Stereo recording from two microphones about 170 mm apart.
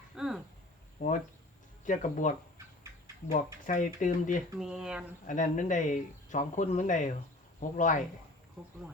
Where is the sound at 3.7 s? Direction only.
50° left (ahead or behind).